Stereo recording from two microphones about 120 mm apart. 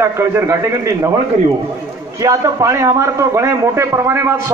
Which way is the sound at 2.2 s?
30° right (ahead or behind).